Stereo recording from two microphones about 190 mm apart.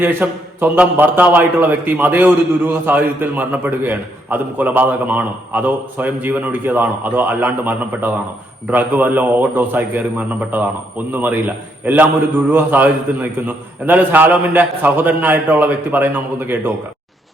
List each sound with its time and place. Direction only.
0.0 s a man's voice: 10° right (ahead or behind)